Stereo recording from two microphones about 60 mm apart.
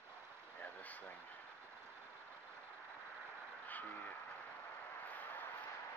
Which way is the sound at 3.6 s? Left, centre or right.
Left.